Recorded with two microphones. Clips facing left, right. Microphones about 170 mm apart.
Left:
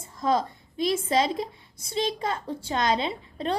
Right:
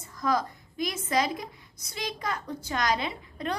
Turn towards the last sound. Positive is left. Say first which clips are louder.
# left 4 dB
turn(degrees=30)  # may be behind; listen again after turning